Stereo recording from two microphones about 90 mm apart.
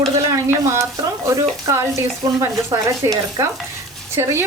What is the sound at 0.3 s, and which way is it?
Speech, 35° right (ahead or behind).